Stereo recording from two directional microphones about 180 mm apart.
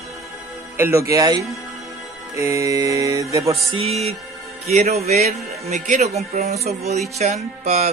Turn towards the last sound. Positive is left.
turn(degrees=-40)  # may be behind; listen again after turning